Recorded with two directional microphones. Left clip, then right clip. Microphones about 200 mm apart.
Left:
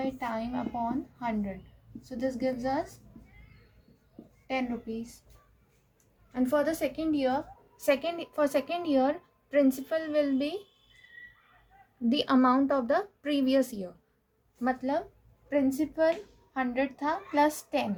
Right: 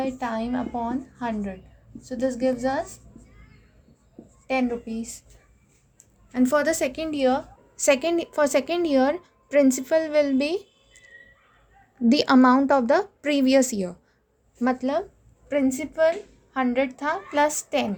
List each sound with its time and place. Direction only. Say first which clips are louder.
0.0 s a woman's voice: right 5 dB; 40° right (ahead or behind)
6.3 s a woman's voice: right 6 dB; 45° right (ahead or behind)
12.0 s a woman's voice: right 7 dB; 40° right (ahead or behind)